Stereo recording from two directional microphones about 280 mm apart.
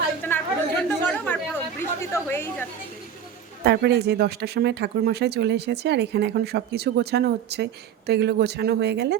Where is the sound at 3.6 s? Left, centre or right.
Right.